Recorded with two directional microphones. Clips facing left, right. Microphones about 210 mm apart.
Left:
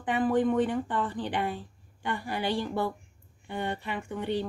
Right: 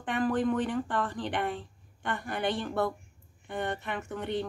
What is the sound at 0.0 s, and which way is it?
Speech, 10° left (ahead or behind).